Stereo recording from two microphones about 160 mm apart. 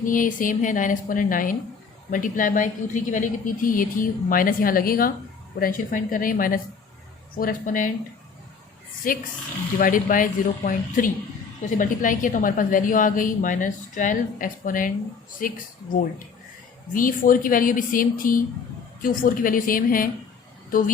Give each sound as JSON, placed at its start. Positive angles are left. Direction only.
{"t": 0.0, "sound": "a woman's voice", "side_deg": 55}
{"t": 9.0, "sound": "a woman's voice", "side_deg": 60}
{"t": 16.9, "sound": "a woman's voice", "side_deg": 60}